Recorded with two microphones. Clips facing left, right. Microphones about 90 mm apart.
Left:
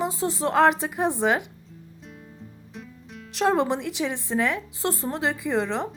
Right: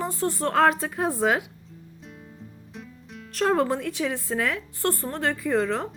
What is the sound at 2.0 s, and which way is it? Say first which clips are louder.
Music: even; centre (ahead or behind).